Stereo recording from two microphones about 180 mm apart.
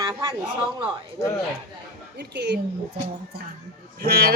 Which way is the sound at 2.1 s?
70° right (ahead or behind).